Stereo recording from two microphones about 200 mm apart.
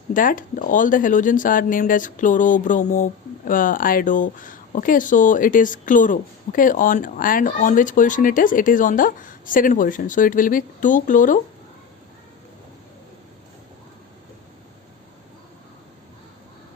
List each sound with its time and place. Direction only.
0.1 s speech: 40° left (ahead or behind)